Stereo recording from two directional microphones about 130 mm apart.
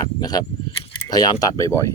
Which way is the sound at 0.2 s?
30° left (ahead or behind).